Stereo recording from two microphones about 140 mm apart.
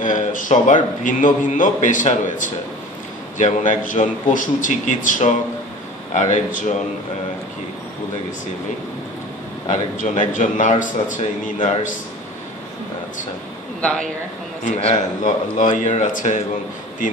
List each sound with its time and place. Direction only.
0.0 s a sound: 70° left (ahead or behind)
1.0 s a man's voice: 65° left (ahead or behind)
9.9 s a man's voice: 65° left (ahead or behind)
13.7 s speech: 10° left (ahead or behind)
14.8 s a man's voice: 55° left (ahead or behind)